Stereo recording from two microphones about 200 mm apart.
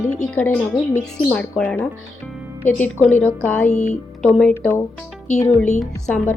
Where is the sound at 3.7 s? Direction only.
35° left (ahead or behind).